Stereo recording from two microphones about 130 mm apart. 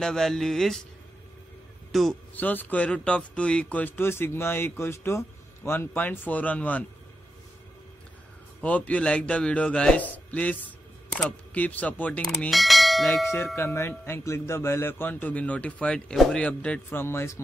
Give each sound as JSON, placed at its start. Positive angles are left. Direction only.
{"t": 0.0, "sound": "a man's voice", "side_deg": 5}
{"t": 1.9, "sound": "a man's voice", "side_deg": 0}
{"t": 2.3, "sound": "speech", "side_deg": 15}
{"t": 8.5, "sound": "speech", "side_deg": 10}
{"t": 11.2, "sound": "bell", "side_deg": 10}
{"t": 13.6, "sound": "speech", "side_deg": 20}